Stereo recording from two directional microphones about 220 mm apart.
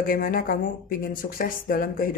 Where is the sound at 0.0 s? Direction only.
40° left (ahead or behind).